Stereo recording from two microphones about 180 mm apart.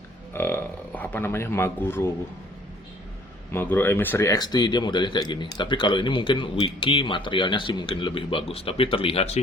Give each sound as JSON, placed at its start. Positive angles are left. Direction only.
{"t": 0.3, "sound": "a man's voice", "side_deg": 10}
{"t": 3.5, "sound": "speech", "side_deg": 10}